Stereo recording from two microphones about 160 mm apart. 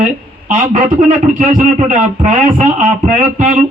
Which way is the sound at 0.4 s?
50° right (ahead or behind).